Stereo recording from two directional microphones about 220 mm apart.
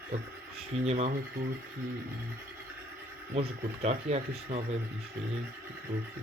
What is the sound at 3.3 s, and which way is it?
Speech, 30° right (ahead or behind).